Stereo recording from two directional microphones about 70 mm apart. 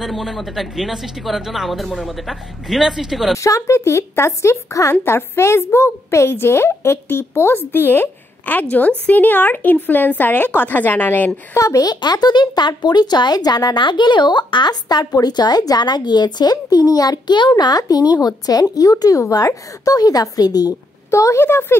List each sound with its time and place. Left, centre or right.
0.0 s speech: centre
3.3 s a woman's voice: left
11.5 s a woman's voice: left
11.9 s speech: left
21.1 s a woman's voice: left